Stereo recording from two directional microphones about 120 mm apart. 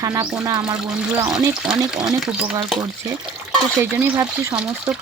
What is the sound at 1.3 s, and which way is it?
Speech, 5° right (ahead or behind).